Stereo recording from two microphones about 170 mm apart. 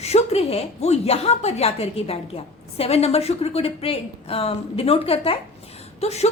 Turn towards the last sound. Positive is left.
turn(degrees=40)  # may be behind; listen again after turning